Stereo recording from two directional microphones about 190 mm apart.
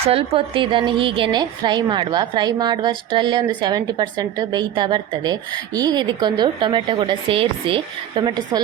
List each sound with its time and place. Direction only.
0.1 s a woman's voice: 30° right (ahead or behind)